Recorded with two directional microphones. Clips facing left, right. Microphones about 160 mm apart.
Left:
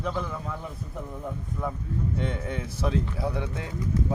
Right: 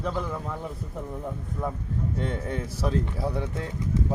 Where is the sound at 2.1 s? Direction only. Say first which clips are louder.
Right 1 dB; 40° right (ahead or behind).